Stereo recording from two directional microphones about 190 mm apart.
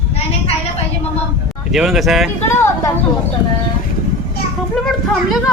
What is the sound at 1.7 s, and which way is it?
Speech, centre (ahead or behind).